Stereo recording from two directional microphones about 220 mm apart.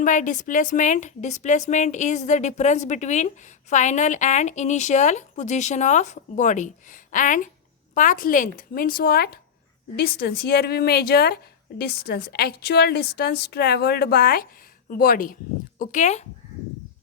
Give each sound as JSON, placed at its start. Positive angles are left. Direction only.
{"t": 0.0, "sound": "a woman's voice", "side_deg": 35}